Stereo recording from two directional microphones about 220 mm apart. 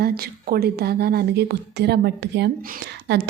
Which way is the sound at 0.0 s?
45° right (ahead or behind).